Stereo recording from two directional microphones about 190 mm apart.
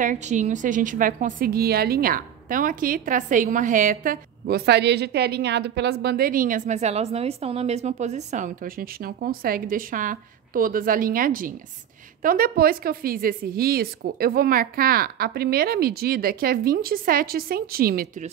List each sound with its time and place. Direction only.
0.0 s a woman's voice: 40° right (ahead or behind)